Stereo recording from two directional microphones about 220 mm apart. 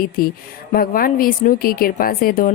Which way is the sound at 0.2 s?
40° left (ahead or behind).